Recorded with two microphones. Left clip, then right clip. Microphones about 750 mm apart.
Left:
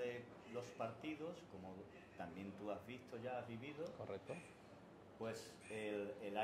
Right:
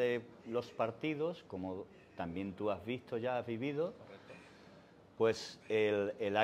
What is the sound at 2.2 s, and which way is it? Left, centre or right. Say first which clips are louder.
Speech: right 12 dB; right.